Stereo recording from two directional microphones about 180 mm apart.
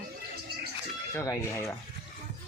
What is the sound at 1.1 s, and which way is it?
Speech, 15° left (ahead or behind).